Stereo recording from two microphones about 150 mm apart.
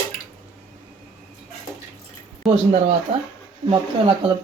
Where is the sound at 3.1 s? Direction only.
40° right (ahead or behind).